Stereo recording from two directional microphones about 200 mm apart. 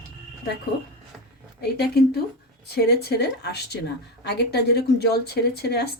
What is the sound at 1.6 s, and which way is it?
A woman's voice, 55° left (ahead or behind).